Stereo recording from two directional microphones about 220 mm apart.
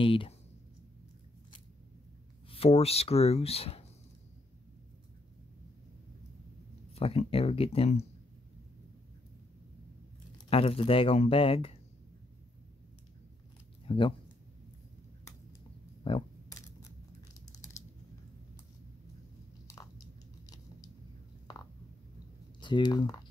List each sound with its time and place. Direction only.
0.0 s speech: 25° left (ahead or behind)
2.5 s speech: 25° left (ahead or behind)
7.0 s speech: 25° left (ahead or behind)
10.3 s speech: 25° left (ahead or behind)
13.8 s speech: 20° left (ahead or behind)
16.0 s a sound: 25° left (ahead or behind)
22.6 s speech: 20° left (ahead or behind)